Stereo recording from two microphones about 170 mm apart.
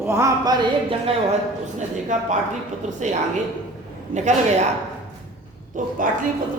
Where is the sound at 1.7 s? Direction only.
45° right (ahead or behind).